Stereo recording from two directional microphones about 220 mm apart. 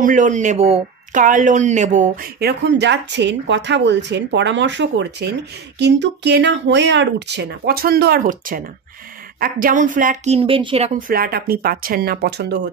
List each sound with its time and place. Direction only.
0.0 s a woman's voice: 35° right (ahead or behind)
2.4 s a woman's voice: 50° right (ahead or behind)